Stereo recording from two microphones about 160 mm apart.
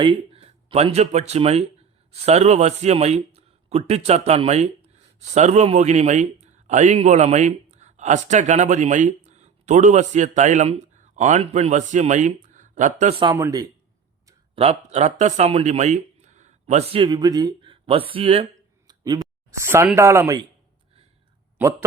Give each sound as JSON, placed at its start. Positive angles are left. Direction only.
{"t": 0.0, "sound": "speech", "side_deg": -35}
{"t": 13.3, "sound": "a man's voice", "side_deg": -20}
{"t": 14.5, "sound": "speech", "side_deg": -40}
{"t": 17.0, "sound": "speech", "side_deg": -25}
{"t": 18.9, "sound": "a sound", "side_deg": -25}
{"t": 20.0, "sound": "speech", "side_deg": -15}
{"t": 21.6, "sound": "a man's voice", "side_deg": -20}